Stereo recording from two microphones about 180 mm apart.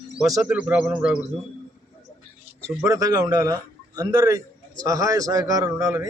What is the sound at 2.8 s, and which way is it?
A man's voice, 20° right (ahead or behind).